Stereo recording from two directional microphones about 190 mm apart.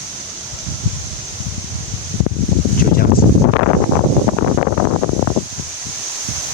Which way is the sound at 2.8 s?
55° left (ahead or behind).